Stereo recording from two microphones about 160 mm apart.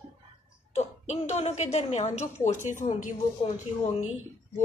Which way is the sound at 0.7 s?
45° left (ahead or behind).